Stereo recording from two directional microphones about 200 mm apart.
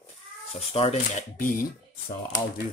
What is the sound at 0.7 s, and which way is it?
Speech, 35° left (ahead or behind).